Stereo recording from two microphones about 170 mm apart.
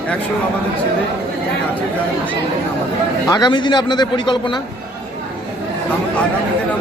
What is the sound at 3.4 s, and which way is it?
A man's voice, 25° left (ahead or behind).